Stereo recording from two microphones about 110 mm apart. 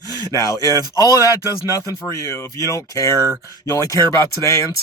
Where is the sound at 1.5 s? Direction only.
30° left (ahead or behind).